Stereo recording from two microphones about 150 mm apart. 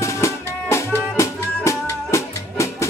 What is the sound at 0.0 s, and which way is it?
Music, 20° left (ahead or behind).